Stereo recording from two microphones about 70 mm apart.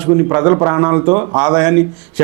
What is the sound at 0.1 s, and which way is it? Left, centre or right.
A man's voice, right.